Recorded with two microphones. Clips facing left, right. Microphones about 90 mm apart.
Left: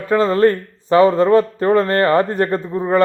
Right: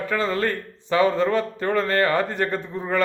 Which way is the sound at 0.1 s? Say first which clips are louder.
Left 11 dB; 35° left (ahead or behind).